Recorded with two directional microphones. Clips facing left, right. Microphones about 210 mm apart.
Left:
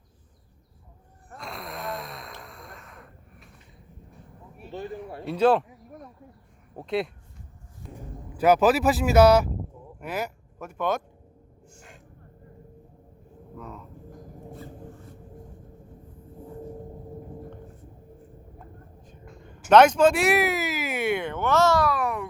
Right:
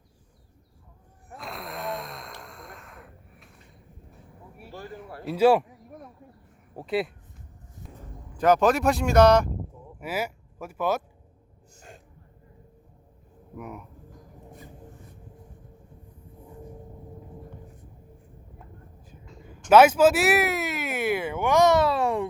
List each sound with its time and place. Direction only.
1.3 s sigh: centre (ahead or behind)
4.1 s vehicle: 10° right (ahead or behind)
4.7 s a sound: 20° left (ahead or behind)
5.2 s a sound: 5° right (ahead or behind)
6.7 s speech: 5° right (ahead or behind)
7.9 s speech: 10° left (ahead or behind)
10.0 s speech: 5° right (ahead or behind)
13.6 s a sound: 15° right (ahead or behind)
19.7 s speech: 5° right (ahead or behind); by 22.3 s 25° right (ahead or behind)